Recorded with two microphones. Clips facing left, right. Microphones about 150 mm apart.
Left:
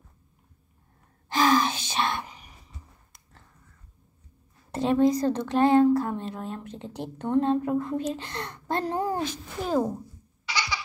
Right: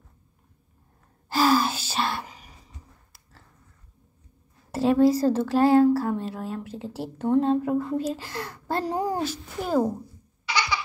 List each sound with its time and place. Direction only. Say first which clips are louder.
1.3 s gasp: right 1 dB; 10° right (ahead or behind)
4.6 s a woman's voice: right 2 dB; 5° right (ahead or behind)
10.4 s baby laughter: right 4 dB; 60° right (ahead or behind)